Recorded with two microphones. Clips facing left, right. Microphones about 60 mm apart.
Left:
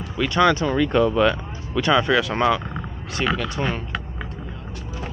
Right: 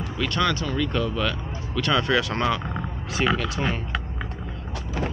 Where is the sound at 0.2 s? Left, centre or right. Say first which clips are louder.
Left 7 dB; centre.